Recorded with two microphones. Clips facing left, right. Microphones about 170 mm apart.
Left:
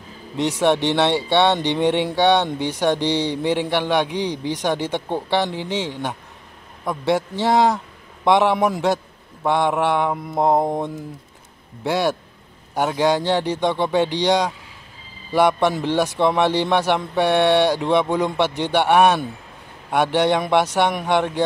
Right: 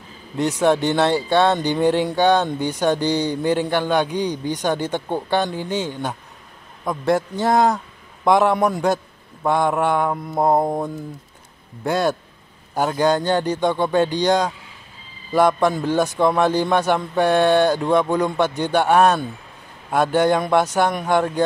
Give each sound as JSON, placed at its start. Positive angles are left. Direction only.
{"t": 0.5, "sound": "a man's voice", "side_deg": 0}
{"t": 5.6, "sound": "speech", "side_deg": 80}
{"t": 5.9, "sound": "a man's voice", "side_deg": 0}